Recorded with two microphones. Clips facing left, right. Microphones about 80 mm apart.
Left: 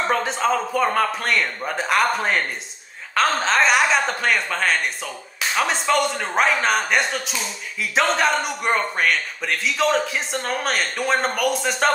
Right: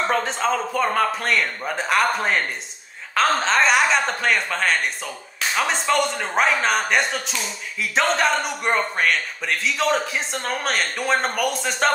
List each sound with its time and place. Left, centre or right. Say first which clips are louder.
0.0 s speech: left 1 dB; centre